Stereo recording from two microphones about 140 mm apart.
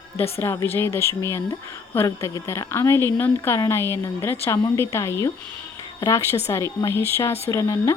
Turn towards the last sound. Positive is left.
turn(degrees=20)  # may be behind; listen again after turning